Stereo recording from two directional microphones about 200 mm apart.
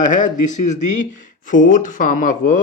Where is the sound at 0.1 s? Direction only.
40° left (ahead or behind).